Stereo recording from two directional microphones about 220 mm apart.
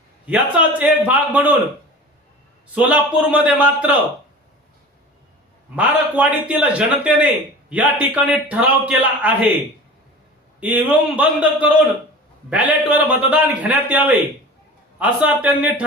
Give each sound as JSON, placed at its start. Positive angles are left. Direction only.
{"t": 0.3, "sound": "a man's voice", "side_deg": -5}
{"t": 2.7, "sound": "a man's voice", "side_deg": -5}
{"t": 5.7, "sound": "a man's voice", "side_deg": -5}
{"t": 10.6, "sound": "a man's voice", "side_deg": -5}